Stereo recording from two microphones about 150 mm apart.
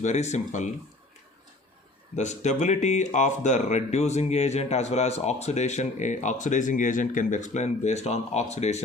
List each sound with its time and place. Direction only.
0.0 s speech: 50° left (ahead or behind)
2.1 s speech: 50° left (ahead or behind)